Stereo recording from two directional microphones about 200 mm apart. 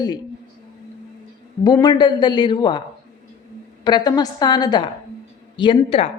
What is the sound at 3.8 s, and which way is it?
Speech, 20° left (ahead or behind).